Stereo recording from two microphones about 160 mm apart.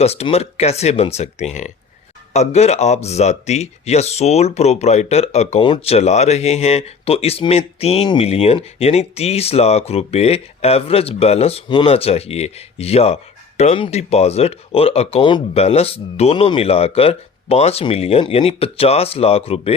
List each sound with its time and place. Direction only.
0.0 s speech: 40° left (ahead or behind)